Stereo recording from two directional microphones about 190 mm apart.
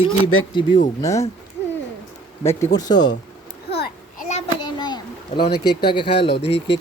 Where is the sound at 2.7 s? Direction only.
20° left (ahead or behind).